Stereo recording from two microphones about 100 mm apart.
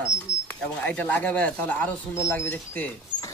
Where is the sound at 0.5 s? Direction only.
15° left (ahead or behind).